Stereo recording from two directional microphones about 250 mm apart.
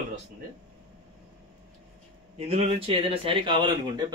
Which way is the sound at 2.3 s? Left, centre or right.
Right.